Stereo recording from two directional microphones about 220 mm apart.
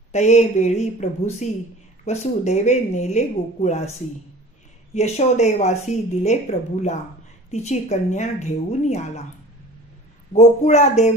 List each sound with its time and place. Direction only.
0.1 s speech: 30° left (ahead or behind)
4.9 s speech: 30° left (ahead or behind)
10.3 s speech: 30° left (ahead or behind)